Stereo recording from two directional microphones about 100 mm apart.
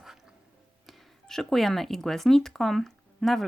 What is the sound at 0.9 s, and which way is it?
Speech, centre (ahead or behind).